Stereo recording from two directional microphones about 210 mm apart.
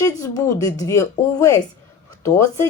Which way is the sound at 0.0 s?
15° left (ahead or behind).